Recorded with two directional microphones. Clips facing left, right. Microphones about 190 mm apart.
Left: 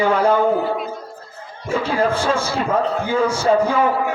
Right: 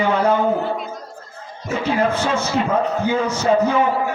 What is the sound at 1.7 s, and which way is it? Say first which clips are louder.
A man's voice: even; 30° left (ahead or behind).